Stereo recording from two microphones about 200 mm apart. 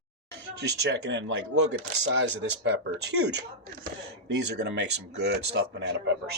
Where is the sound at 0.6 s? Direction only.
60° right (ahead or behind).